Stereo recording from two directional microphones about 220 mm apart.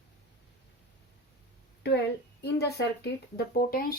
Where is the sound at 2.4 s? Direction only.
50° left (ahead or behind).